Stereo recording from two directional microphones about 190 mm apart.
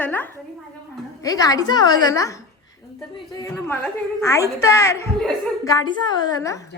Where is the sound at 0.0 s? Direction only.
10° left (ahead or behind).